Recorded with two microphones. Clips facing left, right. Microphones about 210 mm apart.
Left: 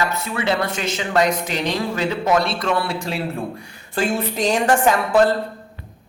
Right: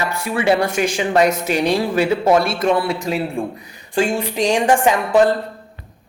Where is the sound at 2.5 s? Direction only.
25° right (ahead or behind).